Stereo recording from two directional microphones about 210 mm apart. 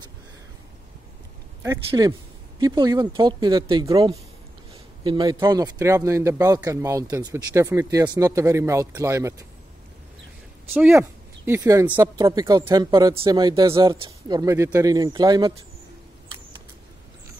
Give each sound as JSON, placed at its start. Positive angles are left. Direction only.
{"t": 1.9, "sound": "speech", "side_deg": -20}
{"t": 10.7, "sound": "speech", "side_deg": -10}